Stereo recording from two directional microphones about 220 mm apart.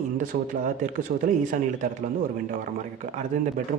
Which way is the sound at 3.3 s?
35° right (ahead or behind).